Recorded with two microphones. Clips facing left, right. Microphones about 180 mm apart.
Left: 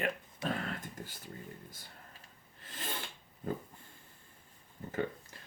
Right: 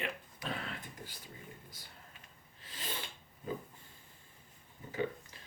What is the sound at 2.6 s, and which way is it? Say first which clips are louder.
Filing: left 2 dB; 50° left (ahead or behind).